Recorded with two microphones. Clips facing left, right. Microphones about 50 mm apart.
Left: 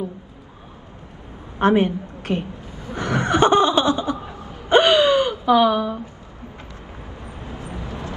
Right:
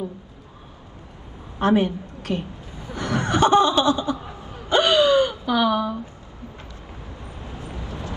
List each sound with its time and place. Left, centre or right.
1.6 s a woman's voice: left
2.9 s a sound: left
7.2 s vehicle: left